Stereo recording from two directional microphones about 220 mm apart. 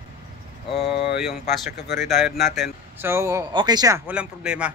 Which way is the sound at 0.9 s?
45° left (ahead or behind).